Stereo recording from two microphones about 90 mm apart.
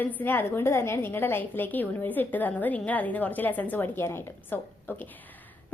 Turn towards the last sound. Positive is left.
turn(degrees=20)  # may be behind; listen again after turning